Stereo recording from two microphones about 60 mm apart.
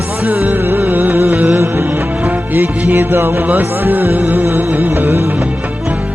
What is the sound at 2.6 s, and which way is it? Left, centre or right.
Music, right.